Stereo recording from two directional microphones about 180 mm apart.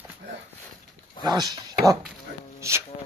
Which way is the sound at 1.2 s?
20° right (ahead or behind).